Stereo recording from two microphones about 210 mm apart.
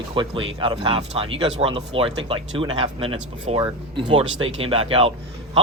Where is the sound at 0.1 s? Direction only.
25° right (ahead or behind).